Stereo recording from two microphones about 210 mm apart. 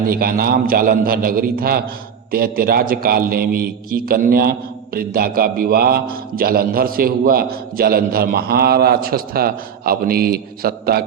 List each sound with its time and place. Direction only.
0.0 s a man's voice: 45° right (ahead or behind)